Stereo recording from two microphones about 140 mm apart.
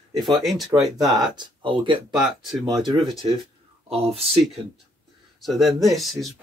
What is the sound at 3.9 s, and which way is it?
Speech, 45° right (ahead or behind).